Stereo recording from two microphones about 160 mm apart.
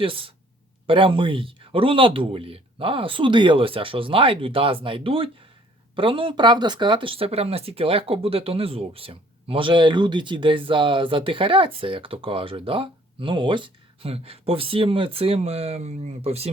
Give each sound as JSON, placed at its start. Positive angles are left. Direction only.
{"t": 0.0, "sound": "speech", "side_deg": -35}